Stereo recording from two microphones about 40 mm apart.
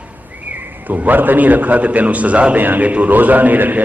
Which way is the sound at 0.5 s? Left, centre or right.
Right.